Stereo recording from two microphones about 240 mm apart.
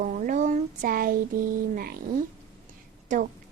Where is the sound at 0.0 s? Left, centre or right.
Right.